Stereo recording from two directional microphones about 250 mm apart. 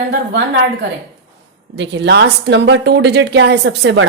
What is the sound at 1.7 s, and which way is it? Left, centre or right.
A woman's voice, right.